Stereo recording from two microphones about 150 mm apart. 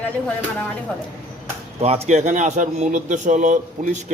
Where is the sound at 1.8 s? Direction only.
45° right (ahead or behind).